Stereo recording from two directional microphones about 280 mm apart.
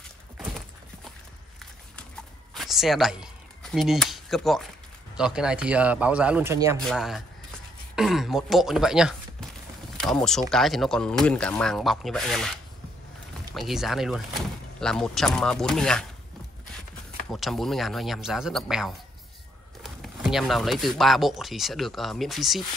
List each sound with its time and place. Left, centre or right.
0.4 s a sound: centre
2.5 s speech: centre
6.8 s speech: centre
13.6 s speech: centre
17.3 s speech: centre